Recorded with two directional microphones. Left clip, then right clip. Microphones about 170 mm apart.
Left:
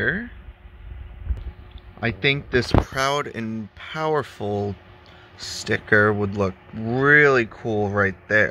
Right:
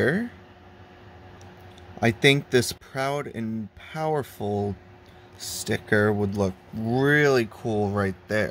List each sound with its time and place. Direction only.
0.0 s speech: 25° right (ahead or behind)
2.0 s speech: 20° right (ahead or behind)
2.9 s speech: 5° right (ahead or behind)